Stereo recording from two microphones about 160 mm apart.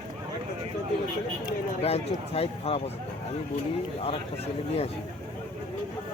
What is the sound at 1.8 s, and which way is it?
Speech, 40° left (ahead or behind).